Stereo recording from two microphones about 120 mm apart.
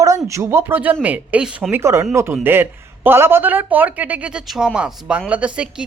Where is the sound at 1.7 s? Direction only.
20° right (ahead or behind).